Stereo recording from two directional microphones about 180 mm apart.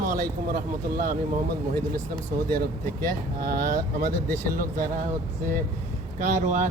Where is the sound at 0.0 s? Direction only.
50° right (ahead or behind).